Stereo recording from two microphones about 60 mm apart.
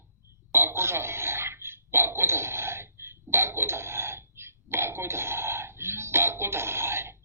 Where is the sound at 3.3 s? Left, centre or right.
Right.